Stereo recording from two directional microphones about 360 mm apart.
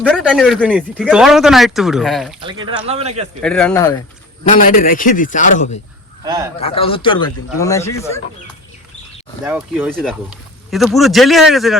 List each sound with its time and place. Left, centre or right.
0.0 s speech: centre
2.4 s a man's voice: centre
3.4 s speech: centre
4.4 s a man's voice: left
6.2 s a man's voice: centre
6.6 s a man's voice: centre
9.4 s speech: centre